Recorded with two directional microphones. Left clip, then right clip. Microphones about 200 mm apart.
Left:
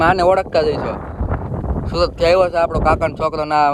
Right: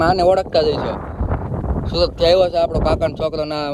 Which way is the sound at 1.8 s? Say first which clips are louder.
Even; centre (ahead or behind).